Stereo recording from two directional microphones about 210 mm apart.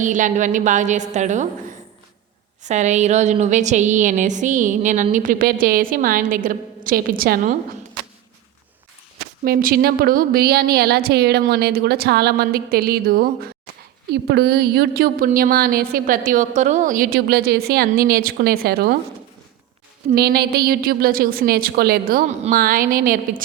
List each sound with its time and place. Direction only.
0.0 s a woman's voice: 35° right (ahead or behind)
2.6 s a woman's voice: 35° right (ahead or behind)
9.4 s a woman's voice: 45° right (ahead or behind)
20.1 s a woman's voice: 50° right (ahead or behind)